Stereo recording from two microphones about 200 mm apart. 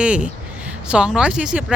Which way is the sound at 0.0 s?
5° right (ahead or behind).